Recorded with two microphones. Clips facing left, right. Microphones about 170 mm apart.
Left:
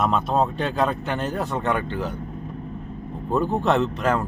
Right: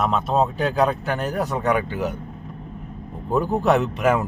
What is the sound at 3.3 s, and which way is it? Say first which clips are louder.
Speech: right 2 dB; 5° right (ahead or behind).